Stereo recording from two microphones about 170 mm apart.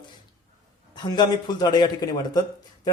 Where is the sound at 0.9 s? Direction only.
25° left (ahead or behind).